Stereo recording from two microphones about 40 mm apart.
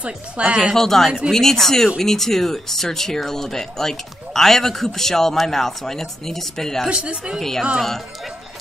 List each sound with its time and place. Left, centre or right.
0.0 s a woman's voice: right
0.7 s speech: centre
6.9 s a woman's voice: right
7.3 s speech: centre